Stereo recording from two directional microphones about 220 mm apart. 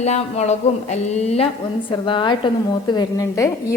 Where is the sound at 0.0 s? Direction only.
30° left (ahead or behind).